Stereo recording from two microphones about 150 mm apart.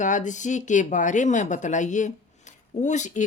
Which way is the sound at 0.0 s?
55° left (ahead or behind).